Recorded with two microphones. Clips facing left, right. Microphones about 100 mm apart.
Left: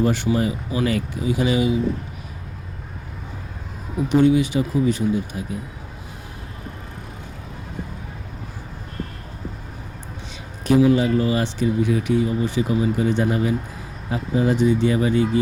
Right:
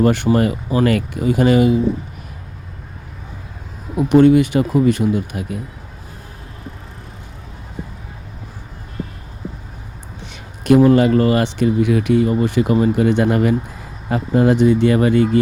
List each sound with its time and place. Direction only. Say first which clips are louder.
0.0 s speech: right 5 dB; 60° right (ahead or behind)
3.9 s speech: right 6 dB; 60° right (ahead or behind)
10.7 s speech: right 5 dB; 60° right (ahead or behind)